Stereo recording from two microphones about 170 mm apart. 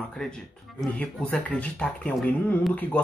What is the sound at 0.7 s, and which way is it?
Speech, 10° left (ahead or behind).